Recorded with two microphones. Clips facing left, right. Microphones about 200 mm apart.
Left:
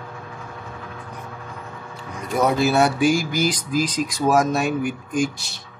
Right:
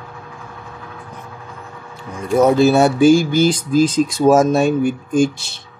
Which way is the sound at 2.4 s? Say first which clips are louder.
Right 5 dB; 25° right (ahead or behind).